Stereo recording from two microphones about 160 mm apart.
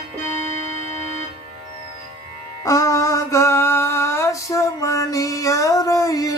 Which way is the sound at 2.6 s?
20° left (ahead or behind).